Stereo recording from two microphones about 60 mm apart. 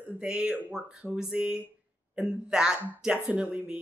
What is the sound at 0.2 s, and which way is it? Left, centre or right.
Speech, centre.